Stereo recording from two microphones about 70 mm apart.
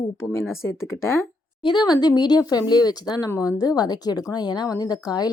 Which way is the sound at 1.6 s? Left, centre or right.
Left.